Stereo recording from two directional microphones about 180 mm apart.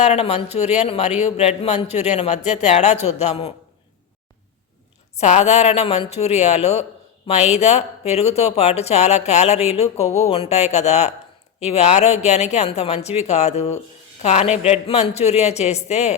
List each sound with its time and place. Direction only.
0.0 s speech: 35° left (ahead or behind)
5.1 s speech: 40° left (ahead or behind)